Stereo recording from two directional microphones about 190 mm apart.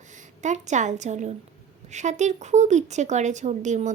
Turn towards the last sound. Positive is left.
turn(degrees=-40)  # may be behind; listen again after turning